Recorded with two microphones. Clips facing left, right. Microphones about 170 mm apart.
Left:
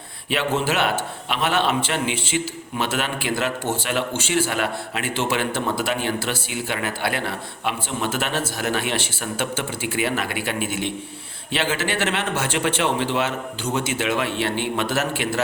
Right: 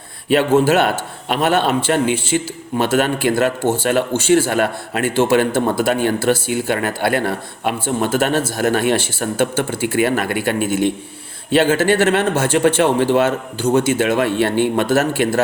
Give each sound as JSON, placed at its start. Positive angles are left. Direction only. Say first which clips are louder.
{"t": 0.3, "sound": "a man's voice", "louder": "right 9 dB", "side_deg": -45}